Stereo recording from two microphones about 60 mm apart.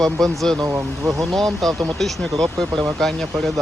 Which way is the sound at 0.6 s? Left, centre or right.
Right.